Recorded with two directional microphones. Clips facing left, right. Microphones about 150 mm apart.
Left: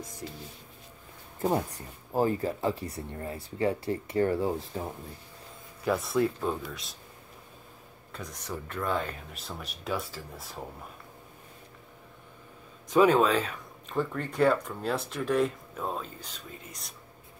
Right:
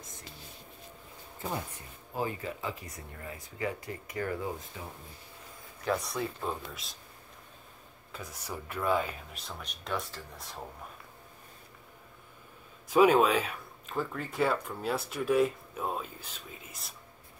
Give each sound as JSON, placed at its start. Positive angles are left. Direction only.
{"t": 1.4, "sound": "speech", "side_deg": 40}
{"t": 5.9, "sound": "speech", "side_deg": 0}
{"t": 8.1, "sound": "speech", "side_deg": -5}
{"t": 12.9, "sound": "speech", "side_deg": -10}